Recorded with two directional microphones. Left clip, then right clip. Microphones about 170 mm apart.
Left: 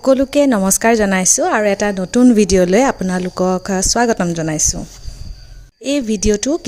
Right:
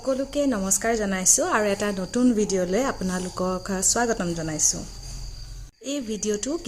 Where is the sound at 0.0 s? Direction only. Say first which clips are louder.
Left 12 dB; 50° left (ahead or behind).